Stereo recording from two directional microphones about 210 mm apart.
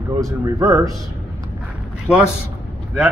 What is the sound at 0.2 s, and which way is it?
Speech, 15° right (ahead or behind).